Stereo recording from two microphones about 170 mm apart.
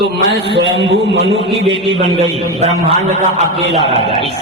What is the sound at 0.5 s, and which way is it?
Speech, 90° right.